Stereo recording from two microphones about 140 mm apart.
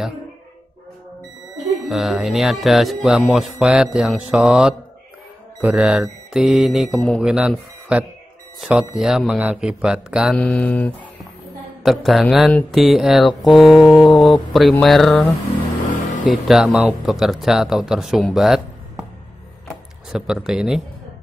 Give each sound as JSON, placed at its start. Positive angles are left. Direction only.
{"t": 1.6, "sound": "speech", "side_deg": 0}
{"t": 10.3, "sound": "speech", "side_deg": 5}
{"t": 11.8, "sound": "speech", "side_deg": 0}
{"t": 16.4, "sound": "speech", "side_deg": 0}
{"t": 20.1, "sound": "speech", "side_deg": -5}